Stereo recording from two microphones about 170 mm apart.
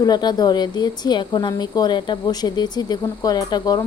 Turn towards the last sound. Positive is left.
turn(degrees=20)  # may be behind; listen again after turning